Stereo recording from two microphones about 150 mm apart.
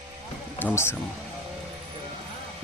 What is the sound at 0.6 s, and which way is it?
Speech, 15° left (ahead or behind).